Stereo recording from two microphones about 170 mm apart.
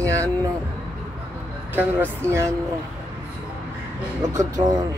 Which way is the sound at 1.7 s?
10° right (ahead or behind).